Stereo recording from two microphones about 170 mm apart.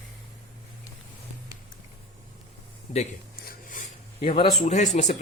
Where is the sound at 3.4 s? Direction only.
55° left (ahead or behind).